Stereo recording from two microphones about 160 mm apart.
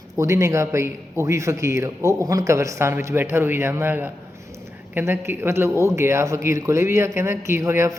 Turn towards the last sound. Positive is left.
turn(degrees=-20)  # may be behind; listen again after turning